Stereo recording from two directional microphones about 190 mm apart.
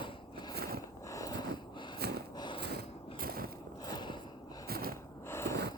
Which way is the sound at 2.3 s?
25° left (ahead or behind).